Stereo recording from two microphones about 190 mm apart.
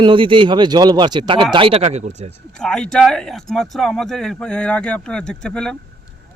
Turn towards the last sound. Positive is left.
turn(degrees=5)  # may be behind; listen again after turning